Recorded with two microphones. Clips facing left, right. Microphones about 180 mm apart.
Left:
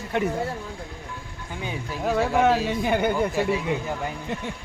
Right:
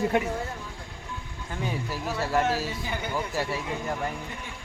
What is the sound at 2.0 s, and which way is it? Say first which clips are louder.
Speech: left 6 dB; 60° left (ahead or behind).